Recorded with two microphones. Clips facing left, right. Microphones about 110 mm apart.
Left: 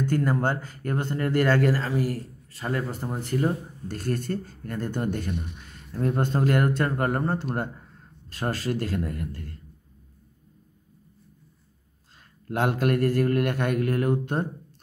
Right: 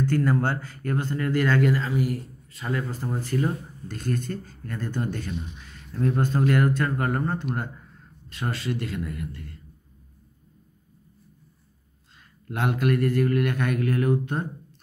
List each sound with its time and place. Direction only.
0.0 s speech: 20° left (ahead or behind)
1.1 s speech: 35° left (ahead or behind)
3.0 s speech: 25° left (ahead or behind)
3.3 s speech: 35° left (ahead or behind)
5.1 s speech: 55° left (ahead or behind)
5.9 s speech: 30° left (ahead or behind)
12.2 s speech: 40° left (ahead or behind)
13.6 s speech: 30° left (ahead or behind)